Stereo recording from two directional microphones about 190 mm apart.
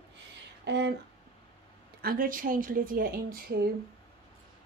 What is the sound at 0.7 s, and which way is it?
Speech, 65° right (ahead or behind).